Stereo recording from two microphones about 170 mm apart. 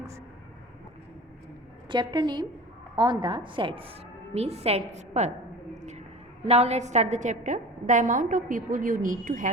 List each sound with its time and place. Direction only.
1.9 s a woman's voice: 25° right (ahead or behind); by 5.3 s 40° right (ahead or behind)
5.7 s a sound: 45° right (ahead or behind)
6.4 s a woman's voice: 40° right (ahead or behind)